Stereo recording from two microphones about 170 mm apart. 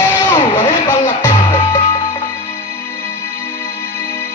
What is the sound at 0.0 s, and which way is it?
Music, 15° left (ahead or behind).